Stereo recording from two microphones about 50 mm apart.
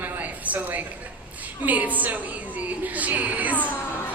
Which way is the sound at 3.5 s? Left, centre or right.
Left.